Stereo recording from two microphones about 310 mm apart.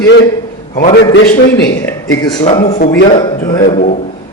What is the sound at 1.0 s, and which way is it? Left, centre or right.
Speech, left.